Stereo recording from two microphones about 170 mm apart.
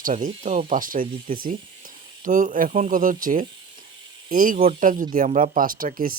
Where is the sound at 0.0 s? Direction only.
50° right (ahead or behind).